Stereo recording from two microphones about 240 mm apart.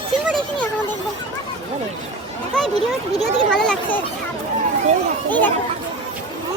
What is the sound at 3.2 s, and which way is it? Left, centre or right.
Speech, centre.